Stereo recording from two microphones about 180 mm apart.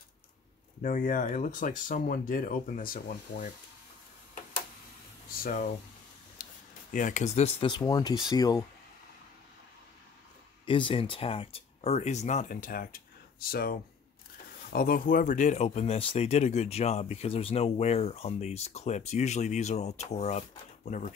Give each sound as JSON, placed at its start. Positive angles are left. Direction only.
{"t": 0.8, "sound": "speech", "side_deg": 45}
{"t": 5.3, "sound": "speech", "side_deg": 50}
{"t": 6.4, "sound": "a sound", "side_deg": 50}
{"t": 6.9, "sound": "speech", "side_deg": 45}
{"t": 10.6, "sound": "speech", "side_deg": 30}